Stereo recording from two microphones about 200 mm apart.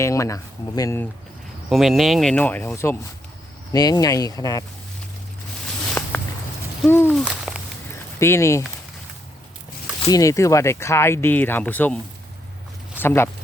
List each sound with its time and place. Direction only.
0.0 s speech: 15° left (ahead or behind)
1.7 s speech: centre (ahead or behind); by 4.6 s 15° left (ahead or behind)
5.9 s walk: 5° left (ahead or behind)
6.8 s speech: 10° left (ahead or behind)
7.1 s owl: 5° right (ahead or behind)
8.2 s speech: 15° left (ahead or behind)
10.1 s speech: 15° left (ahead or behind)
13.0 s speech: 10° left (ahead or behind)